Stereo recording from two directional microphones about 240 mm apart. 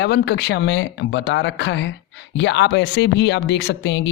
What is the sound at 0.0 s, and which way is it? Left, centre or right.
Speech, left.